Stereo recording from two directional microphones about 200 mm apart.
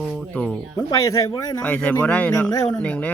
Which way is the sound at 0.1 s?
5° left (ahead or behind).